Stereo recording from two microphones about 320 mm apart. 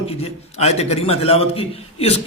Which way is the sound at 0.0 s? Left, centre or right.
Centre.